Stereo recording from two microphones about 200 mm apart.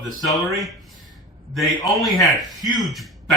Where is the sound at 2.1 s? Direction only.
20° left (ahead or behind).